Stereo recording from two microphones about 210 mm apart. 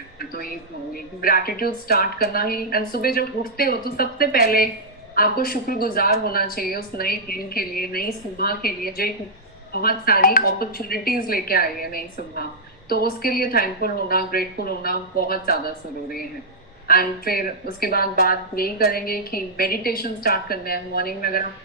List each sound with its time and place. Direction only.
0.2 s a woman's voice: 45° left (ahead or behind)
16.8 s a woman's voice: 45° left (ahead or behind)